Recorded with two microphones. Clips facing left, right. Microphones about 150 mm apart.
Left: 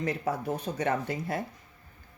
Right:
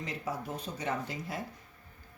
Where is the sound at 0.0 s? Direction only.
60° left (ahead or behind).